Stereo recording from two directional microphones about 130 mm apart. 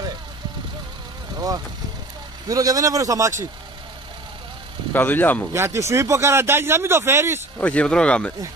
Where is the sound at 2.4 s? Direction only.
25° right (ahead or behind).